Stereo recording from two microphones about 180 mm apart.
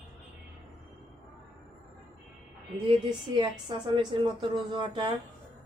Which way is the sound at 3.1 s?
25° right (ahead or behind).